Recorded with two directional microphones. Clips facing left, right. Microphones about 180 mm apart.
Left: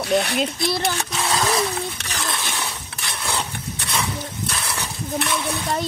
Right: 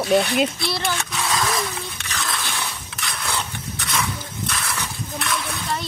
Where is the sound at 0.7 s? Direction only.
40° left (ahead or behind).